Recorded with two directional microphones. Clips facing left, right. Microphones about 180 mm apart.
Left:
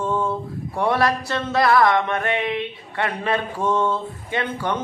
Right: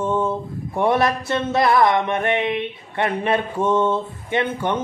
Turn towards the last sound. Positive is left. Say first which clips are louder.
# right 3 dB
turn(degrees=-20)  # may be behind; listen again after turning